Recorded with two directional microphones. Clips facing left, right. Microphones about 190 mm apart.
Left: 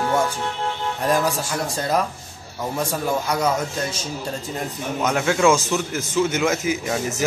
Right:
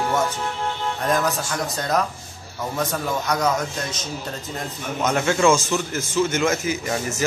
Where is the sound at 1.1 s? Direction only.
10° left (ahead or behind).